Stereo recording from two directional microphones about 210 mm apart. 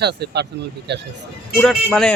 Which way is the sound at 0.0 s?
50° right (ahead or behind).